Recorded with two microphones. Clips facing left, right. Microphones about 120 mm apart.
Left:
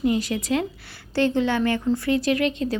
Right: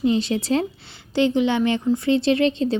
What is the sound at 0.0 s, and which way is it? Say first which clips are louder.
Speech: right 2 dB; 25° right (ahead or behind).